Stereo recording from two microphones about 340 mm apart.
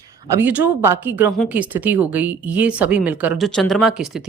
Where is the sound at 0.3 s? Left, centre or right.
Centre.